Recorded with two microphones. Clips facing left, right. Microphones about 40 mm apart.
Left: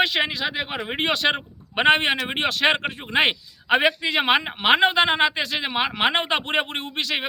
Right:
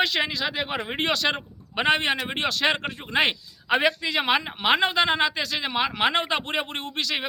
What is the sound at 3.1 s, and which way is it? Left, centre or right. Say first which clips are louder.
Speech: left 2 dB; left.